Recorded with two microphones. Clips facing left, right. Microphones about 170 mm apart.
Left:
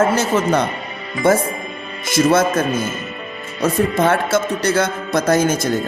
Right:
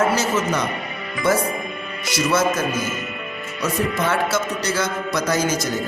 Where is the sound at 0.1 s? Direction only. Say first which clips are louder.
Left 4 dB; 55° left (ahead or behind).